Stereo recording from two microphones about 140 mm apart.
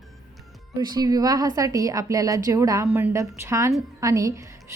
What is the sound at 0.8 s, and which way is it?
A woman's voice, 30° right (ahead or behind).